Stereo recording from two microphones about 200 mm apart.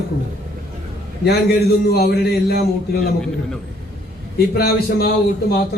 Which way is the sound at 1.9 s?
50° left (ahead or behind).